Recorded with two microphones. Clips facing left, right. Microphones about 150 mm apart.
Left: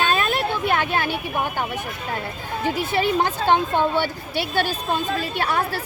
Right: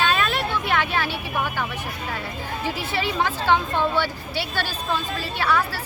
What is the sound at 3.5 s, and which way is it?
Speech, 20° left (ahead or behind).